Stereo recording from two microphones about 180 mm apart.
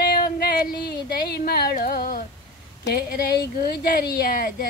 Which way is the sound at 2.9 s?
60° left (ahead or behind).